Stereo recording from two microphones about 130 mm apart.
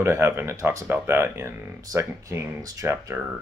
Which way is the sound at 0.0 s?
20° right (ahead or behind).